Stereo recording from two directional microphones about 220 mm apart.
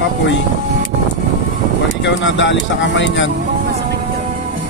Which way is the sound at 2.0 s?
55° left (ahead or behind).